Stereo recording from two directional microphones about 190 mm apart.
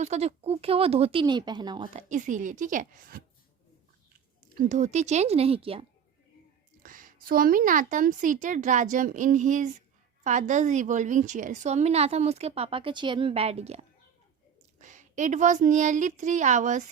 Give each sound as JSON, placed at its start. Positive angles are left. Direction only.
{"t": 0.0, "sound": "a woman's voice", "side_deg": -35}
{"t": 4.5, "sound": "a woman's voice", "side_deg": -40}
{"t": 6.8, "sound": "a woman's voice", "side_deg": -45}